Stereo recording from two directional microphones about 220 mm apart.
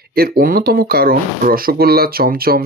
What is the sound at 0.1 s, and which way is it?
Speech, 45° right (ahead or behind).